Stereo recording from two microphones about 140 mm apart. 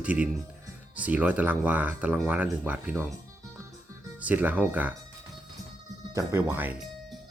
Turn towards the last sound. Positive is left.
turn(degrees=-15)  # may be behind; listen again after turning